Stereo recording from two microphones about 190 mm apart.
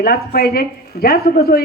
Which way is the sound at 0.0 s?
50° left (ahead or behind).